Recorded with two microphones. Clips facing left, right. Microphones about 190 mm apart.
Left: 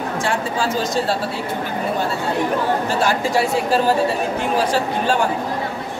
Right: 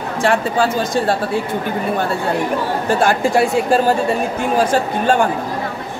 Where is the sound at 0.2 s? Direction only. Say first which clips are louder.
Right 8 dB; 60° right (ahead or behind).